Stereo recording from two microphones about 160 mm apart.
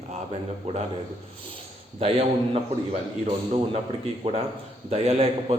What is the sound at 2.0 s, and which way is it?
A man's voice, 40° right (ahead or behind).